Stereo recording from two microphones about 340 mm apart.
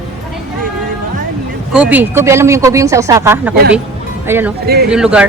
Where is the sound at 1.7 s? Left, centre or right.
Centre.